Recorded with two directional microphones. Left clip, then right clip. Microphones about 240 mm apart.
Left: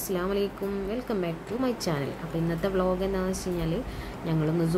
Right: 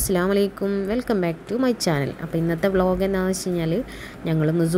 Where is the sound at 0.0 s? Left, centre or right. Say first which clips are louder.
Right 7 dB; right.